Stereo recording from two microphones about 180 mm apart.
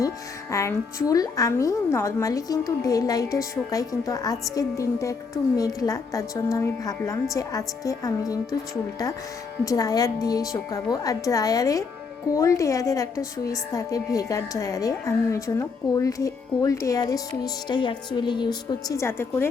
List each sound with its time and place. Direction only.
0.5 s a woman's voice: 15° left (ahead or behind)